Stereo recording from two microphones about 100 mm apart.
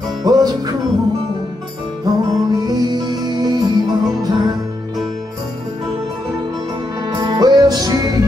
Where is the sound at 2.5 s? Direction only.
45° right (ahead or behind).